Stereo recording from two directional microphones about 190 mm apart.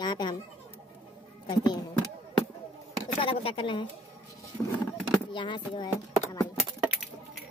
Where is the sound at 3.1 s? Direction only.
30° left (ahead or behind).